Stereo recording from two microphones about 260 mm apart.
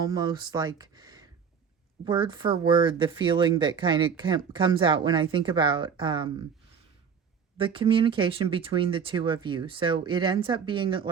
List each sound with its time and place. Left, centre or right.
0.0 s speech: centre
7.6 s speech: centre